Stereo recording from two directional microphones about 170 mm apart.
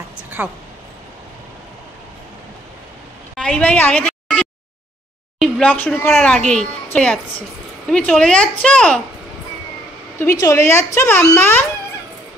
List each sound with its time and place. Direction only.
0.4 s a woman's voice: 10° right (ahead or behind)
3.3 s a sound: 5° left (ahead or behind)
5.4 s speech: 10° left (ahead or behind)
10.4 s speech: 20° left (ahead or behind)